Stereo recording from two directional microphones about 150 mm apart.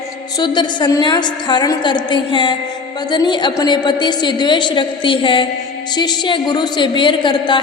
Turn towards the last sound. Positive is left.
turn(degrees=30)  # may be behind; listen again after turning